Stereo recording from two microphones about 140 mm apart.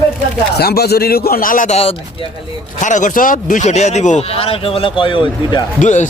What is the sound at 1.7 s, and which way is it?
Speech, 45° left (ahead or behind).